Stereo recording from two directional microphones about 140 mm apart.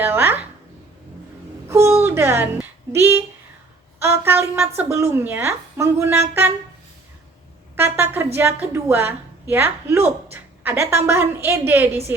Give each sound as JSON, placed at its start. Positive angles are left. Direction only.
{"t": 0.0, "sound": "speech", "side_deg": -15}
{"t": 1.6, "sound": "a woman's voice", "side_deg": -20}
{"t": 7.8, "sound": "a woman's voice", "side_deg": -15}